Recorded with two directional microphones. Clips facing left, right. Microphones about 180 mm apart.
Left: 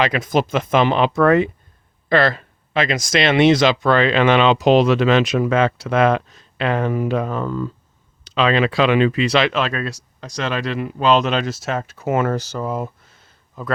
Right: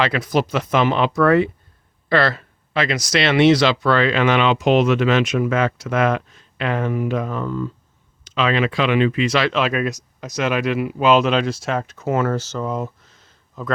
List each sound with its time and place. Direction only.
0.0 s speech: 20° left (ahead or behind)
2.0 s a sound: 20° left (ahead or behind)
3.1 s speech: 20° left (ahead or behind); by 7.7 s 45° left (ahead or behind)
8.4 s speech: 35° left (ahead or behind)
9.5 s speech: 5° right (ahead or behind)
12.0 s speech: 20° left (ahead or behind)